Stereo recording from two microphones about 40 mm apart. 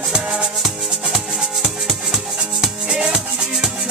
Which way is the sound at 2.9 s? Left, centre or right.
Centre.